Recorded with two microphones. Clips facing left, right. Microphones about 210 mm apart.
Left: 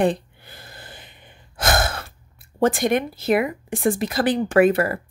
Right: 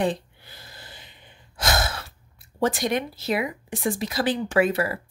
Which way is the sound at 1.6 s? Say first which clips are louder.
Left 4 dB; 50° left (ahead or behind).